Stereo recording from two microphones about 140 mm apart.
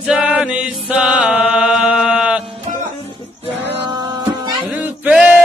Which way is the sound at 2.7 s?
60° right (ahead or behind).